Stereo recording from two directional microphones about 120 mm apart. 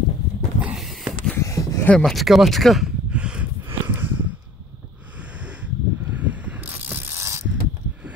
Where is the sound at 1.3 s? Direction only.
25° left (ahead or behind).